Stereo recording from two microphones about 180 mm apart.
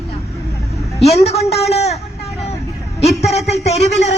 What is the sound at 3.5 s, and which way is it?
Speech, 35° left (ahead or behind).